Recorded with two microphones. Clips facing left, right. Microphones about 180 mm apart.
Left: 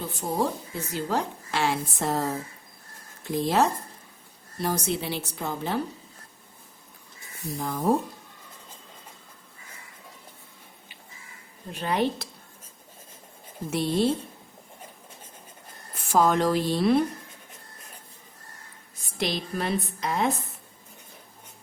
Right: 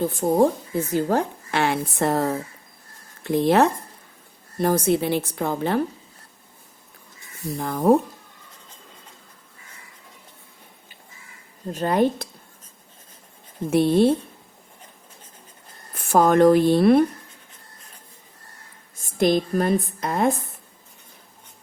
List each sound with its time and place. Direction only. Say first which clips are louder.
0.0 s a woman's voice: right 9 dB; 50° right (ahead or behind)
4.6 s a woman's voice: right 8 dB; 50° right (ahead or behind)
7.6 s a woman's voice: right 7 dB; 55° right (ahead or behind)
11.7 s a woman's voice: right 6 dB; 45° right (ahead or behind)
13.7 s a woman's voice: right 7 dB; 55° right (ahead or behind)
16.0 s a woman's voice: right 6 dB; 55° right (ahead or behind)
18.9 s a woman's voice: right 10 dB; 50° right (ahead or behind)